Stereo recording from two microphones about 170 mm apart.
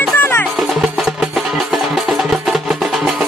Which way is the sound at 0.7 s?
Centre (ahead or behind).